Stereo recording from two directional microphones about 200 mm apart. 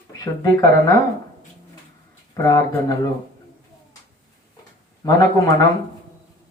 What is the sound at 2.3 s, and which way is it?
Speech, 15° left (ahead or behind).